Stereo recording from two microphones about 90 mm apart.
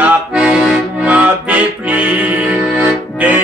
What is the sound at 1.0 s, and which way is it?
Music, 15° right (ahead or behind).